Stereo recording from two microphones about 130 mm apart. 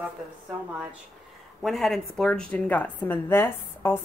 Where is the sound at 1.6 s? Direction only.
Centre (ahead or behind).